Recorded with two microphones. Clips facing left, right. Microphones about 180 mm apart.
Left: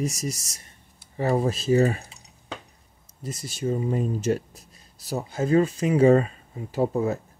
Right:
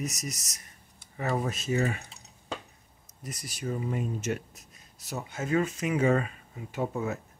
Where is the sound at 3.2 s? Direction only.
25° left (ahead or behind).